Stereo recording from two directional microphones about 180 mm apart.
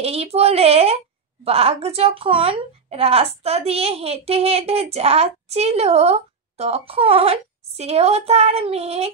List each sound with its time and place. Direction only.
0.0 s a woman's voice: 35° right (ahead or behind)